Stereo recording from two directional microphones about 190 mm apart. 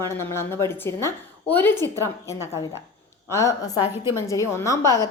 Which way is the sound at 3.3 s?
15° left (ahead or behind).